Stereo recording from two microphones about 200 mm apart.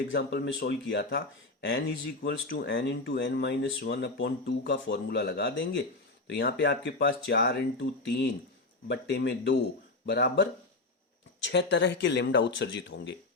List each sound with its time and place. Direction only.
0.1 s speech: 55° left (ahead or behind)
11.5 s speech: 60° left (ahead or behind)